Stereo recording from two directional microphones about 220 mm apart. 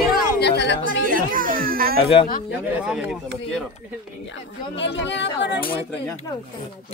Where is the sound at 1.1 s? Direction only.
40° right (ahead or behind).